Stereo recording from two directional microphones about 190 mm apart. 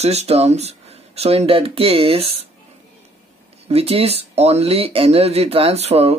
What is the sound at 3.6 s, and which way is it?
Speech, 30° right (ahead or behind).